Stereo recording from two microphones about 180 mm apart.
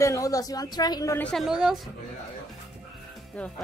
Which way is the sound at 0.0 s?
20° left (ahead or behind).